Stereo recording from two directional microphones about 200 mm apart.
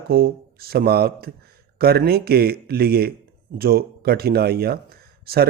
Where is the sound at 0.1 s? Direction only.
50° right (ahead or behind).